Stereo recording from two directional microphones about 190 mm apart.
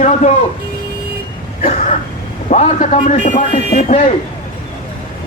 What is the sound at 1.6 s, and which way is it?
Speech, 40° left (ahead or behind).